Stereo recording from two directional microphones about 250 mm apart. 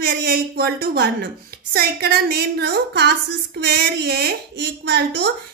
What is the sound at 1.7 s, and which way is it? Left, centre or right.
A woman's voice, right.